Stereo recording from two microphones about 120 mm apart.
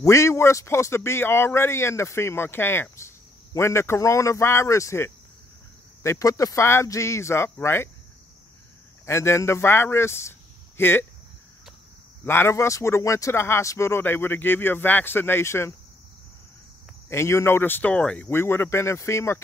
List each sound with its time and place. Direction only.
0.0 s speech: 25° left (ahead or behind)
9.0 s speech: 20° left (ahead or behind)
12.3 s speech: 20° left (ahead or behind)
17.1 s speech: 20° left (ahead or behind)
18.3 s speech: 20° left (ahead or behind)